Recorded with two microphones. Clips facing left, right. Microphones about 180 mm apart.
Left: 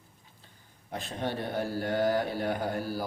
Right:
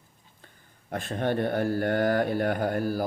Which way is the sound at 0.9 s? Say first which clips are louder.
Right 6 dB; 55° right (ahead or behind).